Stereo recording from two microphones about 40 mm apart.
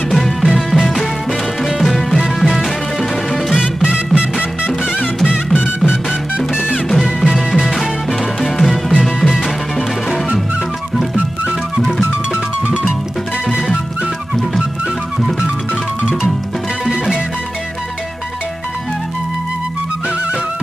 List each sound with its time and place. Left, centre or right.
0.1 s music: centre
3.8 s music: right
5.5 s music: left
6.3 s music: right
7.2 s music: centre
7.5 s music: centre
8.4 s music: centre
9.0 s music: centre